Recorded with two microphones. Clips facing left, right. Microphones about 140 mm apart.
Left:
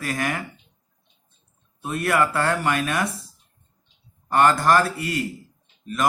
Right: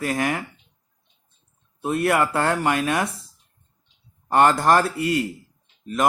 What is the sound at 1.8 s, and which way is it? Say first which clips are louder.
Speech: right 2 dB; 25° right (ahead or behind).